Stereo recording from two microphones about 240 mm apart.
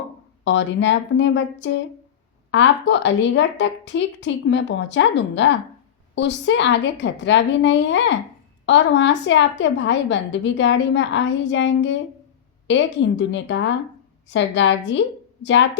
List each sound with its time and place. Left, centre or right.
0.4 s a woman's voice: left